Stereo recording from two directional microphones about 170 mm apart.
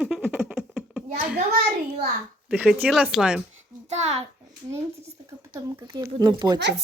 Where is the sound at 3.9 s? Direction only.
40° right (ahead or behind).